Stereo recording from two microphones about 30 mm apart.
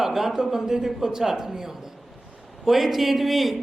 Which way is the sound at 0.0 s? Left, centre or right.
Centre.